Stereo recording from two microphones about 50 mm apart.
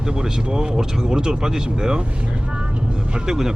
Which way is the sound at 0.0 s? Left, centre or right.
Centre.